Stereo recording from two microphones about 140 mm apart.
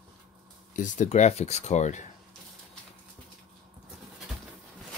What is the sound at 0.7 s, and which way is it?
Speech, 65° left (ahead or behind).